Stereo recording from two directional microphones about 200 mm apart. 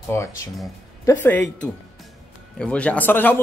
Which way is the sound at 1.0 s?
10° left (ahead or behind).